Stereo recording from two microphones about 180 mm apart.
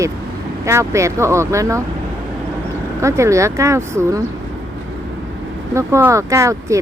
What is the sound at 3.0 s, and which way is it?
Speech, 15° right (ahead or behind).